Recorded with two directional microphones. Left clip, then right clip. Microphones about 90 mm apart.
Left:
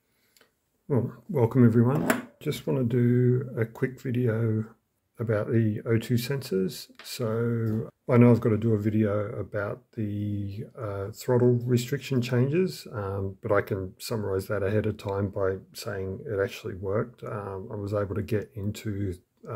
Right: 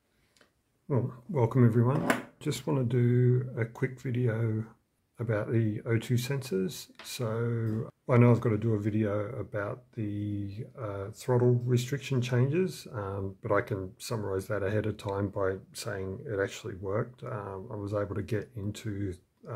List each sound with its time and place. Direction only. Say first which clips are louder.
1.0 s speech: left 4 dB; 20° left (ahead or behind)
2.4 s speech: left 4 dB; centre (ahead or behind); by 15.2 s 15° left (ahead or behind)
15.3 s speech: left 3 dB; 5° left (ahead or behind); by 19.5 s 25° left (ahead or behind)